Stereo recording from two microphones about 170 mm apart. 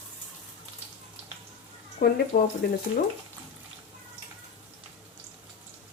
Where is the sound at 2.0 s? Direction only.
60° left (ahead or behind).